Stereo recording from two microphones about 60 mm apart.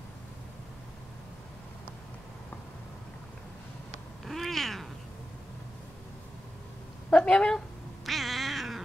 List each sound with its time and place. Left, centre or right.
4.2 s cat: centre
7.1 s a sound: centre
8.0 s cat: centre